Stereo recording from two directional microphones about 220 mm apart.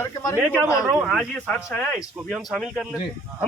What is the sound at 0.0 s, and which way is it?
Speech, 10° left (ahead or behind).